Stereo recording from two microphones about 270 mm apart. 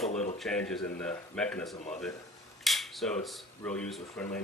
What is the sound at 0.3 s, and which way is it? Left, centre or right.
Speech, centre.